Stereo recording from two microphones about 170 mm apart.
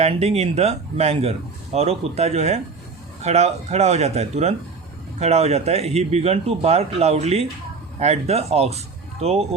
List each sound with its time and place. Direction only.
0.0 s speech: 40° right (ahead or behind)